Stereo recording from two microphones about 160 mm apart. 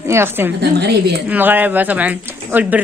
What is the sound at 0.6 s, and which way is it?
Speech, 90° right.